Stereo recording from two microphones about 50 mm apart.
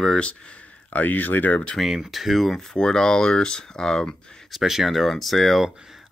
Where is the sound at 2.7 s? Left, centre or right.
Centre.